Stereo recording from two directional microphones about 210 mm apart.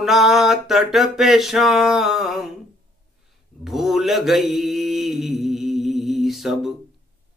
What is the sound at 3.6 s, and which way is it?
Mantra, centre (ahead or behind).